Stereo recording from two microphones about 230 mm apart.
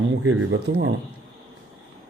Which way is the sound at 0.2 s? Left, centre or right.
Right.